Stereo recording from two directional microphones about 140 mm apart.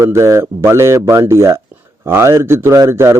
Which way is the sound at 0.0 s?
20° right (ahead or behind).